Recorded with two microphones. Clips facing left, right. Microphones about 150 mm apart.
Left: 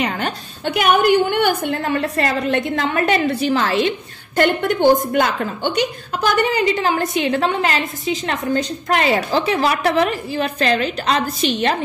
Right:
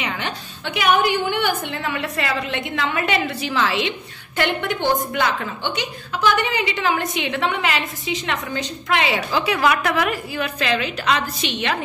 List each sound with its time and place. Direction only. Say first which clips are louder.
0.0 s a woman's voice: left 5 dB; 45° left (ahead or behind)
9.4 s a woman's voice: left 2 dB; 30° left (ahead or behind)